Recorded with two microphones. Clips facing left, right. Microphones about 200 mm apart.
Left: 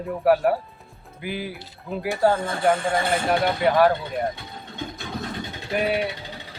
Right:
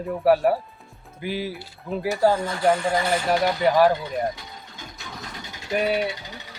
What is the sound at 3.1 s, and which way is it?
Speech, 55° left (ahead or behind).